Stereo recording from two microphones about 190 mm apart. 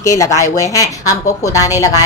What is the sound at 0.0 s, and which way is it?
Speech, 15° left (ahead or behind).